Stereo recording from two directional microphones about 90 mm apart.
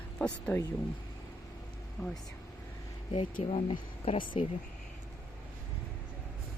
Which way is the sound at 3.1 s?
70° left (ahead or behind).